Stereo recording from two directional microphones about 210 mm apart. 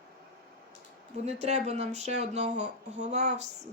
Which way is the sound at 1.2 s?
30° right (ahead or behind).